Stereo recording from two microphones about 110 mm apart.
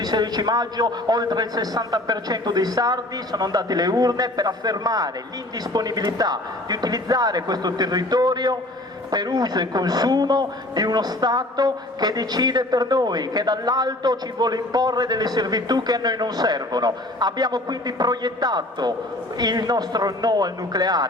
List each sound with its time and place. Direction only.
0.0 s a man's voice: 40° right (ahead or behind)